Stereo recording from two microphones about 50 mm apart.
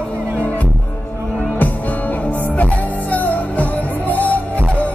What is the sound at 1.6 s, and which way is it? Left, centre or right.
Music, left.